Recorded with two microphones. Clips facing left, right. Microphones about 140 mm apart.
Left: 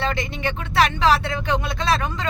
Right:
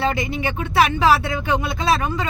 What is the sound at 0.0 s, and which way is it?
Speech, 10° right (ahead or behind).